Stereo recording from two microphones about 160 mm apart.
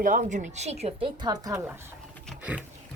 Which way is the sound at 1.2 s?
25° right (ahead or behind).